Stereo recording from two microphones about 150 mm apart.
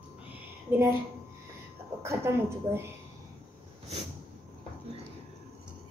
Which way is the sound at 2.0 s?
20° right (ahead or behind).